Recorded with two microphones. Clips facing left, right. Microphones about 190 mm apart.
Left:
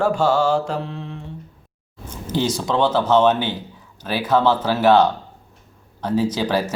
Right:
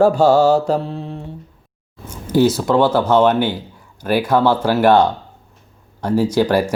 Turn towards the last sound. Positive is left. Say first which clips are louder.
# right 5 dB
turn(degrees=-10)  # may be behind; listen again after turning